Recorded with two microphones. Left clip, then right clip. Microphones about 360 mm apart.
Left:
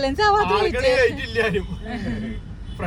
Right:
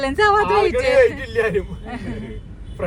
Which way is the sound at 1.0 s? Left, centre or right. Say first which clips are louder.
Right 4 dB; centre.